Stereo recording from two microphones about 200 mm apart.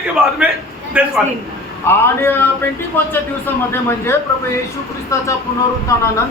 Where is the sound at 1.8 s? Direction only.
10° left (ahead or behind).